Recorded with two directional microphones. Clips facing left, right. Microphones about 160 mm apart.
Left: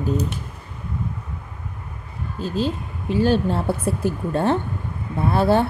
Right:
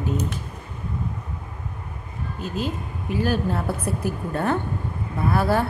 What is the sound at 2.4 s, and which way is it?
Speech, 30° left (ahead or behind).